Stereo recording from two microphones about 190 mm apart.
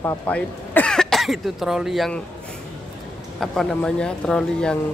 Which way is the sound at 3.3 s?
Centre (ahead or behind).